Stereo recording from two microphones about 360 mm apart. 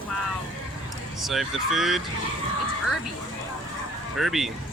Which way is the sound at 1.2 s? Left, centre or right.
Centre.